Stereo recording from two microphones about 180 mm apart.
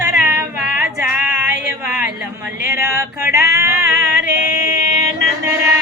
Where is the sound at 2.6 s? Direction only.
10° right (ahead or behind).